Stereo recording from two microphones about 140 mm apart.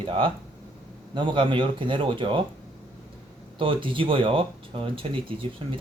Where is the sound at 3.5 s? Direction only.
40° right (ahead or behind).